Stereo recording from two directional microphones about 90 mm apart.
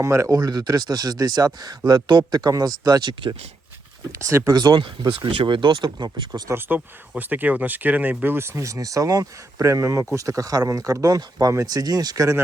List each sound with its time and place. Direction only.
0.0 s speech: 35° right (ahead or behind); by 3.3 s 55° right (ahead or behind)
4.3 s speech: 30° right (ahead or behind)
4.5 s speech: 50° right (ahead or behind)
4.8 s speech: 65° right (ahead or behind)
6.5 s speech: 20° right (ahead or behind)
8.5 s speech: 35° right (ahead or behind)